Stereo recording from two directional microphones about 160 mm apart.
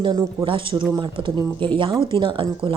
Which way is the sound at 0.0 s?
30° right (ahead or behind).